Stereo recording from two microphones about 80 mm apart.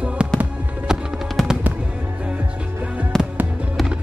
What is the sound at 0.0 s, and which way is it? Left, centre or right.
Fireworks, centre.